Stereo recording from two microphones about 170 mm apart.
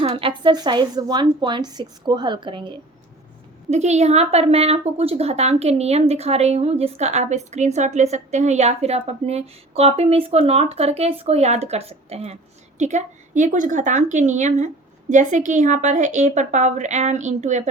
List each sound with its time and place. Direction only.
0.0 s a woman's voice: 35° right (ahead or behind)
3.7 s a woman's voice: 40° right (ahead or behind)